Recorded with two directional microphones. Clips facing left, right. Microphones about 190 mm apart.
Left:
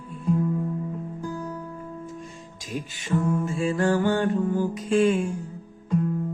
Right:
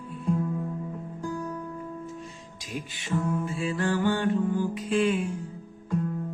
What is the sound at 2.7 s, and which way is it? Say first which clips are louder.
Music: left 4 dB; 45° left (ahead or behind).